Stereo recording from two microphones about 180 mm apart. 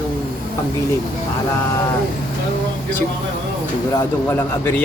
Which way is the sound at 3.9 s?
15° left (ahead or behind).